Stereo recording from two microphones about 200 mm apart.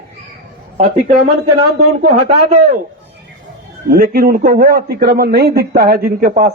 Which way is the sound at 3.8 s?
45° right (ahead or behind).